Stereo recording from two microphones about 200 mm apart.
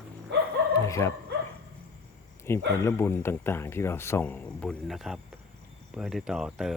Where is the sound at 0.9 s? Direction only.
15° left (ahead or behind).